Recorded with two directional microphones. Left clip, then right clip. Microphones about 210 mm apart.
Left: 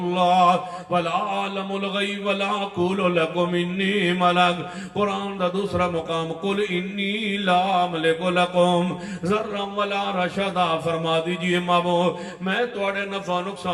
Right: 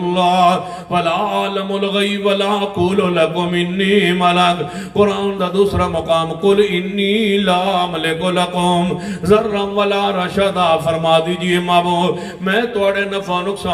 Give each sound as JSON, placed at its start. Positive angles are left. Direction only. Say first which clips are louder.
{"t": 0.1, "sound": "mantra", "louder": "right 4 dB", "side_deg": -50}